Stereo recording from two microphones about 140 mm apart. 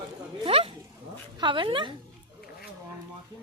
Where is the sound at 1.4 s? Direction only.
35° right (ahead or behind).